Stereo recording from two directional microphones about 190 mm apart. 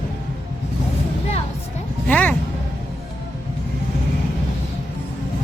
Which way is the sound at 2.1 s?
10° left (ahead or behind).